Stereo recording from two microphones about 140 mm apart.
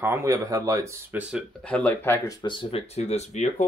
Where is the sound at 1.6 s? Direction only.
10° left (ahead or behind).